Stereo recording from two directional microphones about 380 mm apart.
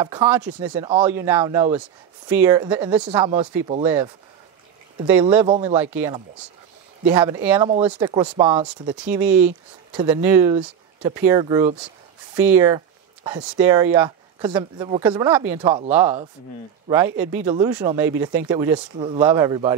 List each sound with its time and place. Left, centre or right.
0.0 s speech: centre
5.1 s speech: centre